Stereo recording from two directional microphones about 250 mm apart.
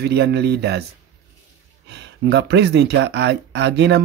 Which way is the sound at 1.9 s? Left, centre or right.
Right.